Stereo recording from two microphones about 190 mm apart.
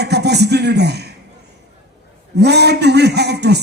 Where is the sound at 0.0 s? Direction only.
60° right (ahead or behind).